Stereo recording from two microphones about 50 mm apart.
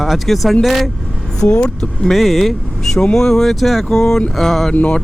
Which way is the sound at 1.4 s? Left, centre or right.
Left.